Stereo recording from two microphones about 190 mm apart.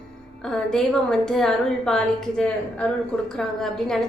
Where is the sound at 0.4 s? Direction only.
5° left (ahead or behind).